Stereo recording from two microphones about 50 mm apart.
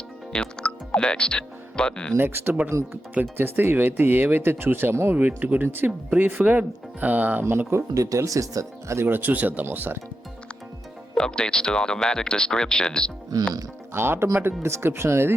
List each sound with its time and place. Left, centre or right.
0.3 s speech: centre
2.1 s speech: right
2.6 s speech: right
5.1 s speech: right
7.7 s speech: right
9.0 s speech: right
9.6 s speech: right
11.1 s speech: centre
13.9 s speech: right